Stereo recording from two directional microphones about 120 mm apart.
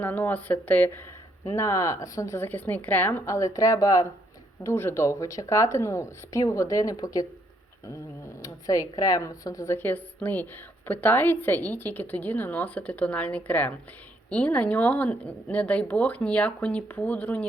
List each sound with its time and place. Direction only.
0.0 s speech: 15° left (ahead or behind)
1.5 s speech: 25° left (ahead or behind)